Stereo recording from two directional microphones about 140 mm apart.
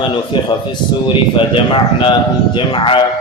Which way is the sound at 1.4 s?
40° left (ahead or behind).